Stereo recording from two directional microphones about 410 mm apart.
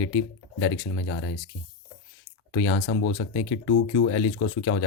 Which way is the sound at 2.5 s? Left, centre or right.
Left.